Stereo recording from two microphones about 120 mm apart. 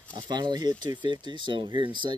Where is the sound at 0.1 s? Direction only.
40° right (ahead or behind).